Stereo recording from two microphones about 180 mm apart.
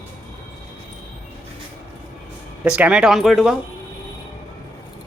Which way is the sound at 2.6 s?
5° right (ahead or behind).